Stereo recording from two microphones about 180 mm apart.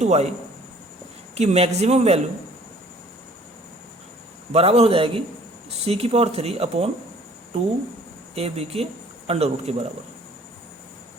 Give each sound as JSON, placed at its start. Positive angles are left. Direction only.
{"t": 0.0, "sound": "speech", "side_deg": -35}
{"t": 1.4, "sound": "speech", "side_deg": -35}
{"t": 4.5, "sound": "speech", "side_deg": -35}
{"t": 8.4, "sound": "speech", "side_deg": -35}